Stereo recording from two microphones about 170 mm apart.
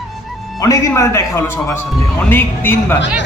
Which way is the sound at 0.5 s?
20° left (ahead or behind).